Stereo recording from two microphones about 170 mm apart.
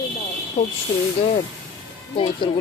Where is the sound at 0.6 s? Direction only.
40° left (ahead or behind).